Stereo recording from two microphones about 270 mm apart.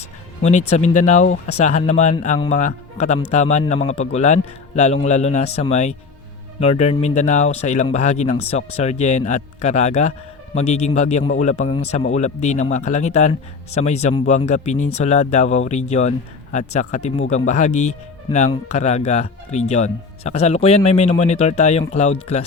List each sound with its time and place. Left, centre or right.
0.7 s speech: left